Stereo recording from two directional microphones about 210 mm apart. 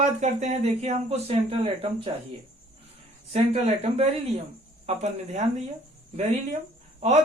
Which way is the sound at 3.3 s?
30° right (ahead or behind).